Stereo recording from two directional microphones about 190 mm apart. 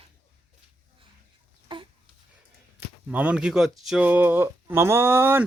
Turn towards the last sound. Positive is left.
turn(degrees=-10)  # may be behind; listen again after turning